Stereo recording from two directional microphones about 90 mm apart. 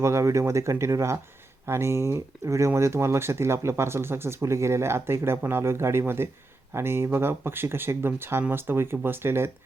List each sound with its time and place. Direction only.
0.0 s speech: 35° right (ahead or behind)